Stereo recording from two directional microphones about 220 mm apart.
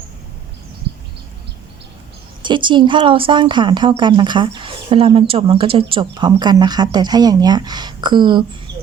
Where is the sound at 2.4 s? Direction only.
20° right (ahead or behind).